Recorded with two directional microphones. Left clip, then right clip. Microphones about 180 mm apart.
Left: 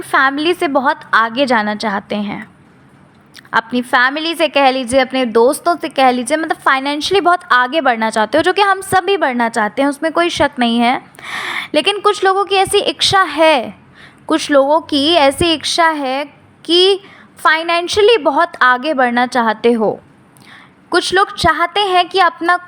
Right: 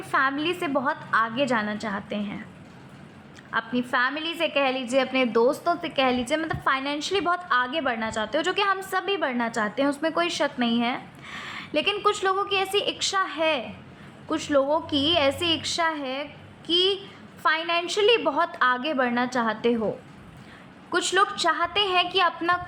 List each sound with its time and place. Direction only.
0.0 s a woman's voice: 45° left (ahead or behind)
14.3 s a woman's voice: 45° left (ahead or behind)
20.9 s a woman's voice: 40° left (ahead or behind)